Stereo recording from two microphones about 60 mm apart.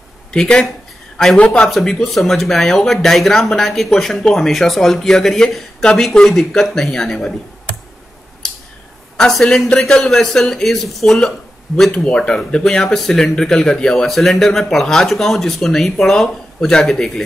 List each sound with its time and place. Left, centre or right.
0.3 s a man's voice: centre
1.4 s speech: centre
1.7 s speech: centre
9.1 s speech: centre
12.0 s speech: centre